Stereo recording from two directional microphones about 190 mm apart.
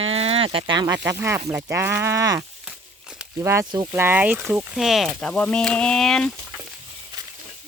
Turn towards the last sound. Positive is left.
turn(degrees=5)  # may be behind; listen again after turning